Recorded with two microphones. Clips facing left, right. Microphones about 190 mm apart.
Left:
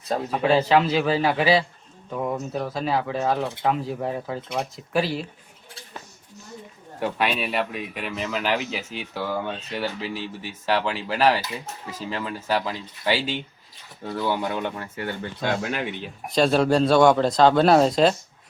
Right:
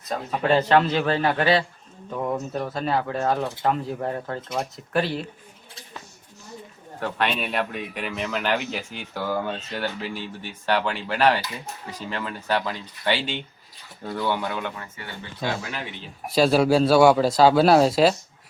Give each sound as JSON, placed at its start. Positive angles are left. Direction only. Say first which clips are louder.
{"t": 0.3, "sound": "speech", "louder": "even", "side_deg": 5}
{"t": 7.0, "sound": "speech", "louder": "left 1 dB", "side_deg": 5}
{"t": 14.4, "sound": "speech", "louder": "left 2 dB", "side_deg": 20}
{"t": 15.2, "sound": "speech", "louder": "left 1 dB", "side_deg": 55}
{"t": 16.3, "sound": "speech", "louder": "right 1 dB", "side_deg": -5}